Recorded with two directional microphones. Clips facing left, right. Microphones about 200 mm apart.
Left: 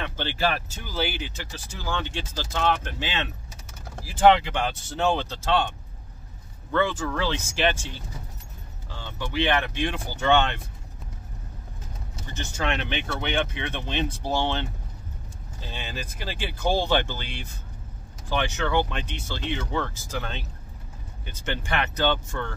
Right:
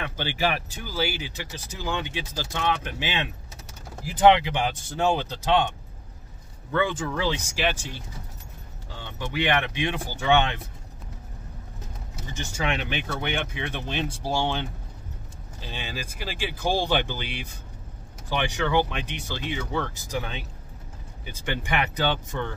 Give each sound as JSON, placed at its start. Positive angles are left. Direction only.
{"t": 0.0, "sound": "speech", "side_deg": -10}
{"t": 6.7, "sound": "speech", "side_deg": -15}
{"t": 9.4, "sound": "speech", "side_deg": -15}
{"t": 12.4, "sound": "speech", "side_deg": -5}
{"t": 15.7, "sound": "speech", "side_deg": -10}